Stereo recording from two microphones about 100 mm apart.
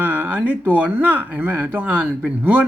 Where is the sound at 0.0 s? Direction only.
15° right (ahead or behind).